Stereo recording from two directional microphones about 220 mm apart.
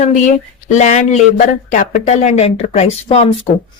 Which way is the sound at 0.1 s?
35° left (ahead or behind).